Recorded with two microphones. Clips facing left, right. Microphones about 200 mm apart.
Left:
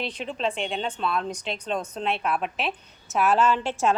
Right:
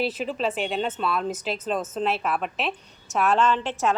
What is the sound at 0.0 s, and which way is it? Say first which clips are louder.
A woman's voice: right 3 dB; 5° right (ahead or behind).